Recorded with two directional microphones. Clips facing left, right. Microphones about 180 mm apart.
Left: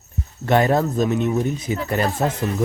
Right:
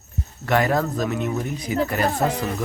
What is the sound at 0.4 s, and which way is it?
Speech, 25° left (ahead or behind).